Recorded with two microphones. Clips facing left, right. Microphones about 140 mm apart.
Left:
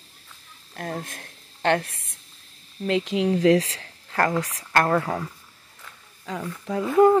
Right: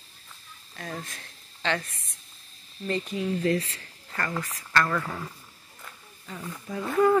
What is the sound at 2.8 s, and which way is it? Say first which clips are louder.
Speech: left 6 dB; 85° left.